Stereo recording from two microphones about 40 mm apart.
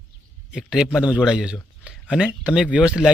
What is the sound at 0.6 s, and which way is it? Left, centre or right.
Speech, centre.